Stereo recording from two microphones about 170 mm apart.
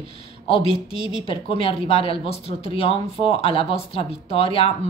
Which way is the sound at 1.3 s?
35° left (ahead or behind).